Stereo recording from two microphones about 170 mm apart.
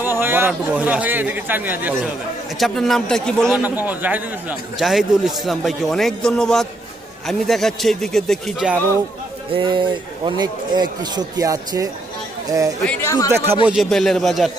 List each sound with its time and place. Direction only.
0.0 s speech: 15° right (ahead or behind)
2.6 s a man's voice: centre (ahead or behind)
3.6 s a man's voice: 10° right (ahead or behind)
9.5 s speech: 30° right (ahead or behind)
12.8 s speech: 10° left (ahead or behind)
13.7 s a man's voice: centre (ahead or behind)